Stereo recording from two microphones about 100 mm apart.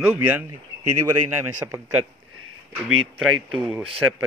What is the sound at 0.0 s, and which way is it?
A man's voice, 15° right (ahead or behind).